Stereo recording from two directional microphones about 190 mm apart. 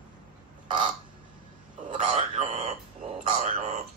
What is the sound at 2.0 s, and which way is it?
Speech, 35° right (ahead or behind).